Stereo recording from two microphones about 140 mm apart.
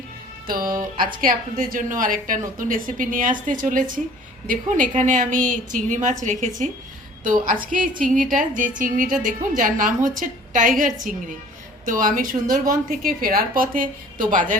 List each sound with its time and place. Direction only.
0.4 s music: 90° right
0.9 s a woman's voice: 90° right; by 14.4 s 70° right (ahead or behind)